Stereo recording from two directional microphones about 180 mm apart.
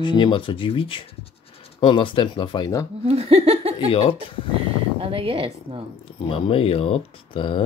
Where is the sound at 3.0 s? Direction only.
35° right (ahead or behind).